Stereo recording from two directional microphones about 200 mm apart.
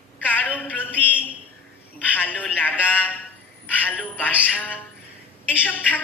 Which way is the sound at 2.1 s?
10° left (ahead or behind).